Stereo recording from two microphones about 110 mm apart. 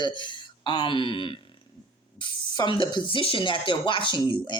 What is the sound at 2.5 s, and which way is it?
Speech, 45° left (ahead or behind).